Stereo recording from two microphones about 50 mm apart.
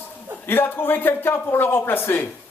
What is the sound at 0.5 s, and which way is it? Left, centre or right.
Speech, left.